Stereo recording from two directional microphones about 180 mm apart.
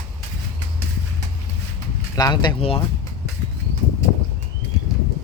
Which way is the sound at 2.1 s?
20° left (ahead or behind).